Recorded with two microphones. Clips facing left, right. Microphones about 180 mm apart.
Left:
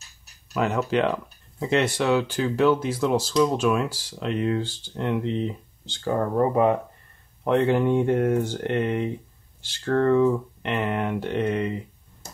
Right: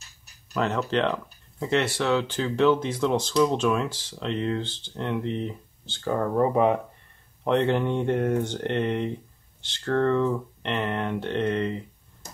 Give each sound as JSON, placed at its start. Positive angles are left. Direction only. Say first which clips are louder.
{"t": 0.5, "sound": "speech", "louder": "left 2 dB", "side_deg": 5}
{"t": 6.0, "sound": "speech", "louder": "left 1 dB", "side_deg": 5}